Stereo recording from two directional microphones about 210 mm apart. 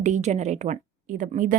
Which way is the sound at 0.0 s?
35° right (ahead or behind).